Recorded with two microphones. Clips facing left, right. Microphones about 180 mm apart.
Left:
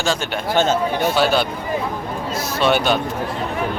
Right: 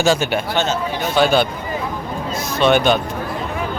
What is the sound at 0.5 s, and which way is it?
Speech, 50° left (ahead or behind).